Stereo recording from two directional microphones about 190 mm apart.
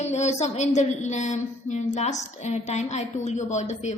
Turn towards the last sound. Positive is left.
turn(degrees=35)  # may be behind; listen again after turning